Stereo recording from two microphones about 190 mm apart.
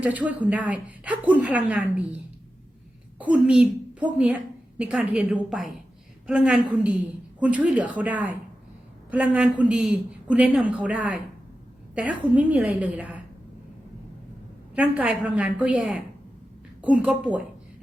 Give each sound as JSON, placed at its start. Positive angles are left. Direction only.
{"t": 0.0, "sound": "a woman's voice", "side_deg": -10}
{"t": 14.8, "sound": "a woman's voice", "side_deg": -5}